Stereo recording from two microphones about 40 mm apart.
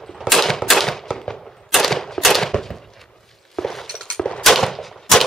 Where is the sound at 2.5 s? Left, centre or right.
Centre.